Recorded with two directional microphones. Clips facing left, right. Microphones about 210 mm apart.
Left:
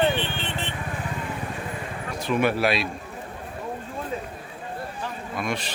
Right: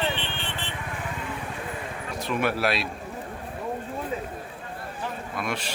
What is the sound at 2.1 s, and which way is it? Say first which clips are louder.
Speech: left 4 dB; centre (ahead or behind).